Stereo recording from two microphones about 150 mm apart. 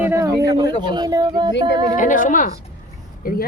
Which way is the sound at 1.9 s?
60° left (ahead or behind).